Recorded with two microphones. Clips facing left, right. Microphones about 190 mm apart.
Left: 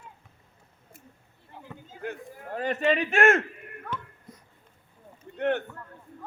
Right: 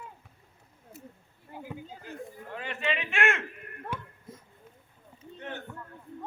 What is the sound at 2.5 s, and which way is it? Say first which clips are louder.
Speech: left 8 dB; 40° left (ahead or behind).